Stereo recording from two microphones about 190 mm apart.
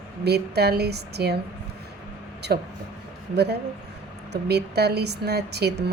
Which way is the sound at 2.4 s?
60° right (ahead or behind).